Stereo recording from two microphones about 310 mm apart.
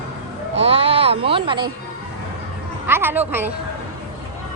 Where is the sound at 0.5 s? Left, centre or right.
Centre.